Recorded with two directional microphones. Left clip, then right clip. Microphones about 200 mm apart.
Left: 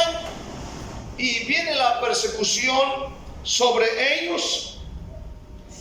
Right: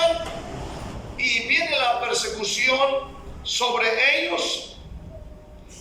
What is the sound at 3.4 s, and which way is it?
A man's voice, 25° left (ahead or behind).